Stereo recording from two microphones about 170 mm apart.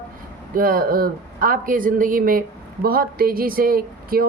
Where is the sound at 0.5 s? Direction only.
60° right (ahead or behind).